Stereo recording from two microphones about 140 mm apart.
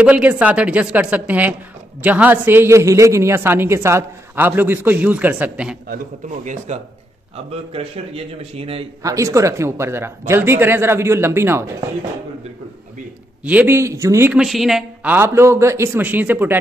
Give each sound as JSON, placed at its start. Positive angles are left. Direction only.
{"t": 0.0, "sound": "a woman's voice", "side_deg": -10}
{"t": 6.4, "sound": "speech", "side_deg": -60}
{"t": 7.7, "sound": "a man's voice", "side_deg": -45}
{"t": 9.0, "sound": "a woman's voice", "side_deg": -25}
{"t": 13.4, "sound": "a woman's voice", "side_deg": -10}
{"t": 14.3, "sound": "a woman's voice", "side_deg": 0}
{"t": 15.0, "sound": "a woman's voice", "side_deg": -15}